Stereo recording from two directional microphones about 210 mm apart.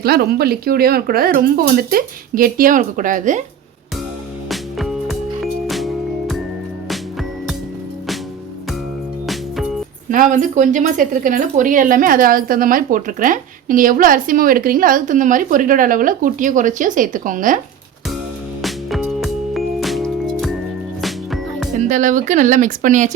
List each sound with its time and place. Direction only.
0.0 s speech: 50° right (ahead or behind)
4.4 s music: centre (ahead or behind)
9.2 s music: centre (ahead or behind)
10.1 s speech: 40° right (ahead or behind)
18.6 s music: centre (ahead or behind)
21.8 s speech: 35° right (ahead or behind)